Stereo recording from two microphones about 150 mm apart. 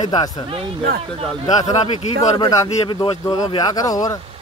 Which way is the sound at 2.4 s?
25° left (ahead or behind).